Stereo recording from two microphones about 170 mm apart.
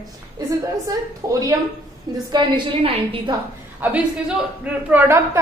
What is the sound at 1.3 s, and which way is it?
A woman's voice, 20° right (ahead or behind).